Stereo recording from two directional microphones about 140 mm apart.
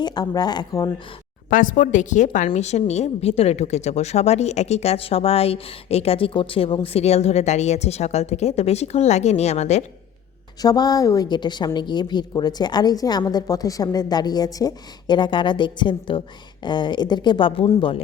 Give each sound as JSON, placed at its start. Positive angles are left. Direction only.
{"t": 0.0, "sound": "a woman's voice", "side_deg": 30}
{"t": 1.5, "sound": "a woman's voice", "side_deg": 75}
{"t": 2.6, "sound": "a woman's voice", "side_deg": 50}
{"t": 10.6, "sound": "a woman's voice", "side_deg": 25}